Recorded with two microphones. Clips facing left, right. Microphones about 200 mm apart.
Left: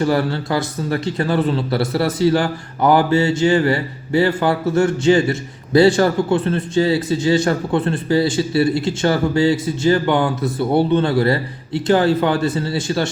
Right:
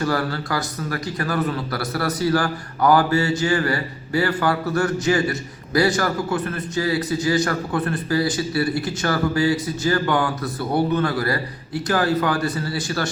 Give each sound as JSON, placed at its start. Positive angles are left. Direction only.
{"t": 0.0, "sound": "a man's voice", "side_deg": 25}